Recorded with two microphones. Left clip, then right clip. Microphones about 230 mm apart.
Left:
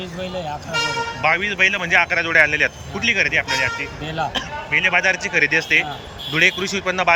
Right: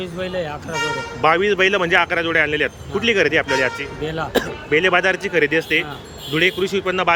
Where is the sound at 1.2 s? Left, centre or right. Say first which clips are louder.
Right 2 dB; centre.